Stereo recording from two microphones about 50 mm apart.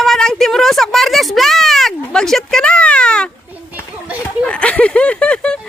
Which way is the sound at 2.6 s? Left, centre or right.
Left.